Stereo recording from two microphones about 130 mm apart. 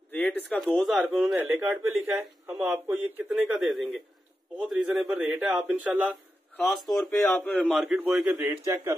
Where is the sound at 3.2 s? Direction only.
5° right (ahead or behind).